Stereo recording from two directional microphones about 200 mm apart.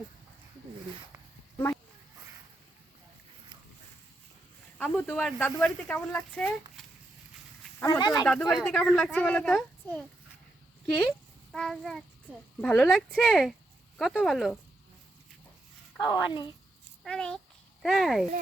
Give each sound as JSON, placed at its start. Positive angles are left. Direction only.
{"t": 4.8, "sound": "speech", "side_deg": 5}
{"t": 7.8, "sound": "speech", "side_deg": 20}
{"t": 8.3, "sound": "speech", "side_deg": 5}
{"t": 11.5, "sound": "speech", "side_deg": 0}
{"t": 16.0, "sound": "speech", "side_deg": 20}
{"t": 17.0, "sound": "a child's voice", "side_deg": 5}